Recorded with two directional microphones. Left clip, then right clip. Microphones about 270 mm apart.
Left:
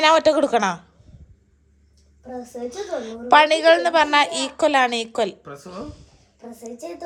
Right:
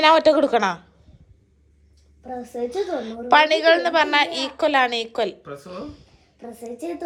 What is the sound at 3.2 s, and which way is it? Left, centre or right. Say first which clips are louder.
A man's voice: left 2 dB; centre.